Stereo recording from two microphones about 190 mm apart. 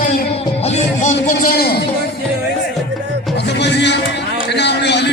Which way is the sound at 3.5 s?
65° left (ahead or behind).